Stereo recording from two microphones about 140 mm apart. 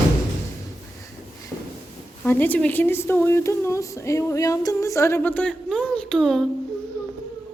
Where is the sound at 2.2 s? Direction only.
10° left (ahead or behind).